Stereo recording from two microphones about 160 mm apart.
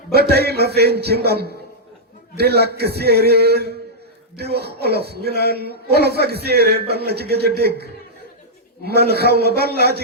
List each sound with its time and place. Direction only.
0.1 s a man's voice: 85° right
8.9 s a man's voice: 90° right